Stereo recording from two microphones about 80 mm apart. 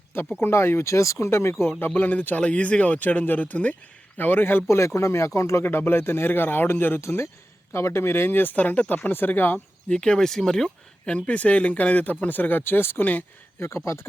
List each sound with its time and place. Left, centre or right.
0.3 s speech: left
1.9 s speech: centre
4.9 s speech: left
5.6 s speech: left
9.9 s speech: centre
13.7 s speech: left